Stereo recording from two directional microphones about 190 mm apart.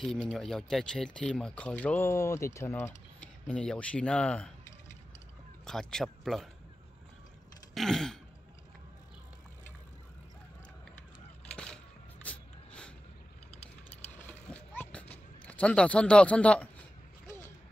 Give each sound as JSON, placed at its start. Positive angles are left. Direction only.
{"t": 0.0, "sound": "speech", "side_deg": 5}
{"t": 5.7, "sound": "speech", "side_deg": 5}
{"t": 7.7, "sound": "speech", "side_deg": 0}
{"t": 11.5, "sound": "a sound", "side_deg": 5}
{"t": 14.1, "sound": "mechanisms", "side_deg": 10}